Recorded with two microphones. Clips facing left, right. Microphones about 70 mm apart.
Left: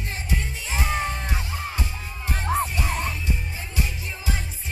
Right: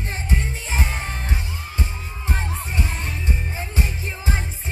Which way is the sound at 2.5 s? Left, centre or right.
Left.